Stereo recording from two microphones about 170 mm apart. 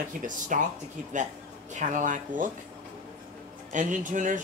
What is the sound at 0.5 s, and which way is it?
Speech, 50° right (ahead or behind).